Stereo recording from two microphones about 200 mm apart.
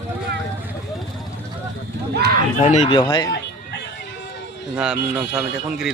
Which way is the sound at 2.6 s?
35° left (ahead or behind).